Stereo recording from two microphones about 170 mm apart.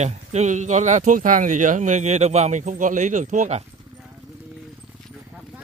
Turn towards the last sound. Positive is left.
turn(degrees=-45)  # may be behind; listen again after turning